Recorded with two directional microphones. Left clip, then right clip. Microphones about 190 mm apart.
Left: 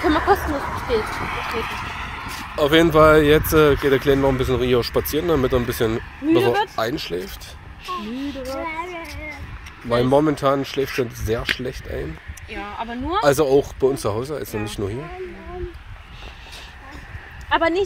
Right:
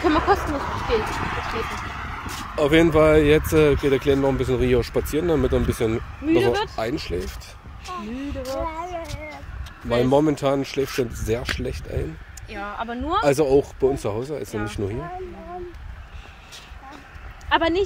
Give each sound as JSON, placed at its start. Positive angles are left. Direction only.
{"t": 0.0, "sound": "speech", "side_deg": 35}
{"t": 0.8, "sound": "speech", "side_deg": 15}
{"t": 1.3, "sound": "speech", "side_deg": 0}
{"t": 1.6, "sound": "a woman's voice", "side_deg": -15}
{"t": 8.6, "sound": "child singing", "side_deg": -5}
{"t": 10.0, "sound": "speech", "side_deg": -10}
{"t": 11.0, "sound": "speech", "side_deg": -30}
{"t": 11.5, "sound": "speech", "side_deg": -10}
{"t": 17.5, "sound": "speech", "side_deg": 50}